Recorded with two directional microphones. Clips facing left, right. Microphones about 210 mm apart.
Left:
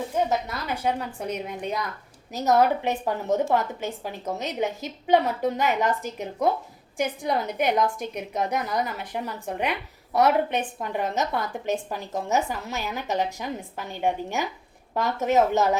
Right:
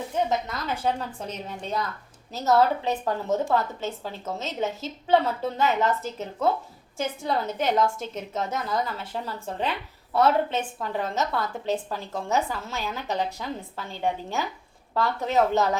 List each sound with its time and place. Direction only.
0.3 s a woman's voice: 10° left (ahead or behind)